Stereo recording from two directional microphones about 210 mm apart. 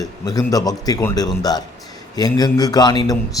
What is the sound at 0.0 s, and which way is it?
A man's voice, 15° left (ahead or behind).